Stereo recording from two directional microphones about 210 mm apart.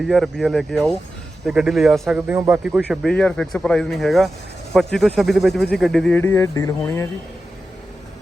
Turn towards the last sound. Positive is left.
turn(degrees=15)  # may be behind; listen again after turning